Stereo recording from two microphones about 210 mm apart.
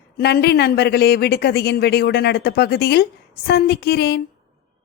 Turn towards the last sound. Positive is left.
turn(degrees=50)  # may be behind; listen again after turning